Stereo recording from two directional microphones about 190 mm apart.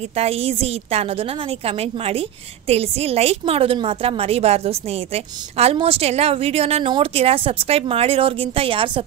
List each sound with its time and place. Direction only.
0.1 s a woman's voice: 30° right (ahead or behind)